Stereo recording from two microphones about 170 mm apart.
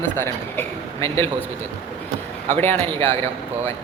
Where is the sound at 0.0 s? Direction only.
15° left (ahead or behind).